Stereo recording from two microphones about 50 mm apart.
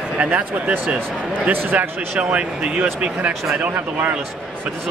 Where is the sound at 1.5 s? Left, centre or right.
Right.